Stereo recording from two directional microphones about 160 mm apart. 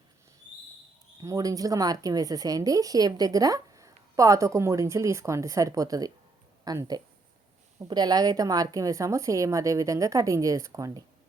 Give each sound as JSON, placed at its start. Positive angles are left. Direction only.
{"t": 1.2, "sound": "speech", "side_deg": -20}